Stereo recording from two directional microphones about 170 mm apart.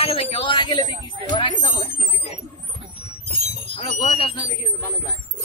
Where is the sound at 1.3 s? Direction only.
30° left (ahead or behind).